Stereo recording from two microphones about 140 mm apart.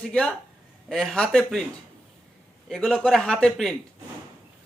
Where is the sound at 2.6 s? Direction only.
Centre (ahead or behind).